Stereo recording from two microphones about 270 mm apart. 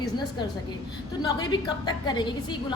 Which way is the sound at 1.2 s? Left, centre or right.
Centre.